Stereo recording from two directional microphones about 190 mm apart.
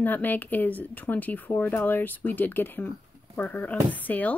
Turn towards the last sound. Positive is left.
turn(degrees=10)  # may be behind; listen again after turning